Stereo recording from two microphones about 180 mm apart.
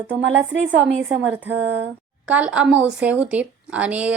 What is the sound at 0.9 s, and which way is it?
Speech, 90° right.